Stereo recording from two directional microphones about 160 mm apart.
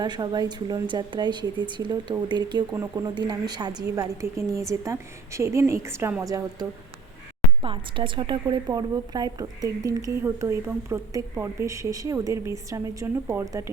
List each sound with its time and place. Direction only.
0.0 s a woman's voice: 25° right (ahead or behind)
7.6 s a woman's voice: 30° right (ahead or behind)